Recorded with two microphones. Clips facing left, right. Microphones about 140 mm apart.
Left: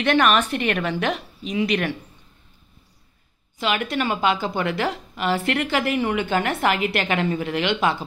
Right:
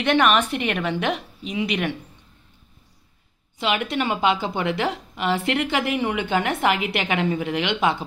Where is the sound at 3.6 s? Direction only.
20° right (ahead or behind).